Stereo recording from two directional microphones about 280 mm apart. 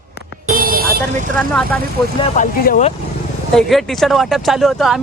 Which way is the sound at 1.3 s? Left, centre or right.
Centre.